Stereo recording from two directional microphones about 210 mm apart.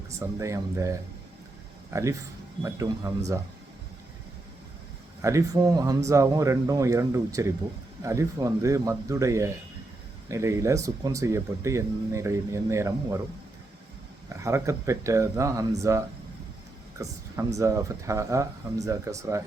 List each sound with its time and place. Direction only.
0.1 s speech: 15° right (ahead or behind)
5.2 s speech: 15° right (ahead or behind)
14.4 s speech: 15° right (ahead or behind)
17.6 s speech: 15° right (ahead or behind)